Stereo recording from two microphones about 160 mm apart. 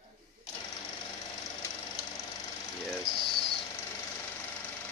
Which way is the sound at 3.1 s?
35° left (ahead or behind).